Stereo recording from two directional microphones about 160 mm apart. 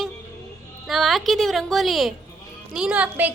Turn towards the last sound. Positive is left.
turn(degrees=-10)  # may be behind; listen again after turning